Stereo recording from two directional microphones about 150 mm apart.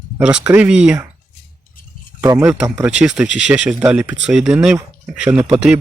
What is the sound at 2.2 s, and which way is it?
Speech, 20° right (ahead or behind).